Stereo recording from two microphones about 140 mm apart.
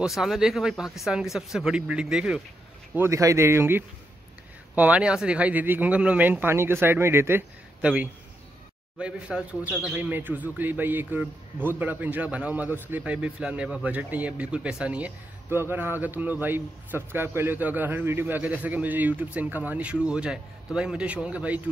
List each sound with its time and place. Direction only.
0.0 s speech: centre (ahead or behind)
2.9 s speech: 20° right (ahead or behind)